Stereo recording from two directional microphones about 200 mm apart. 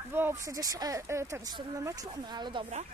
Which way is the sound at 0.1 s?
10° right (ahead or behind).